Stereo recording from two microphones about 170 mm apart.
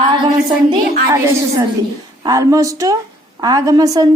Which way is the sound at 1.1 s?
20° right (ahead or behind).